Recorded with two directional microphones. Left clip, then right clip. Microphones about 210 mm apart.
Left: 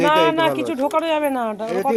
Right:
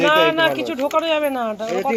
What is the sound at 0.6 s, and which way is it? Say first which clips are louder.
Speech: even; 15° left (ahead or behind).